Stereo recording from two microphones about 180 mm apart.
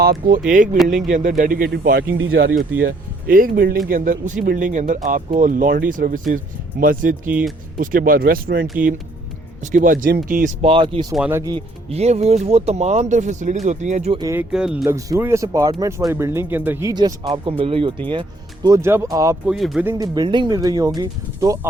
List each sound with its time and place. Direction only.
0.0 s speech: 55° right (ahead or behind)
2.1 s speech: 80° right
3.2 s speech: 50° right (ahead or behind)
8.6 s speech: 5° right (ahead or behind)
9.6 s speech: 45° right (ahead or behind)
10.6 s speech: 30° right (ahead or behind)
11.1 s speech: 10° right (ahead or behind)
11.5 s speech: 35° right (ahead or behind)
14.2 s speech: 15° right (ahead or behind)
14.5 s speech: 5° right (ahead or behind)
14.8 s speech: 15° right (ahead or behind)
16.9 s speech: 25° right (ahead or behind)
19.5 s speech: centre (ahead or behind)
19.8 s speech: 15° right (ahead or behind)